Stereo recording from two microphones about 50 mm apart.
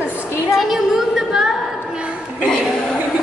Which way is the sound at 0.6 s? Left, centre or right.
Centre.